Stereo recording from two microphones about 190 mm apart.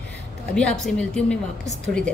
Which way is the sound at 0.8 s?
5° left (ahead or behind).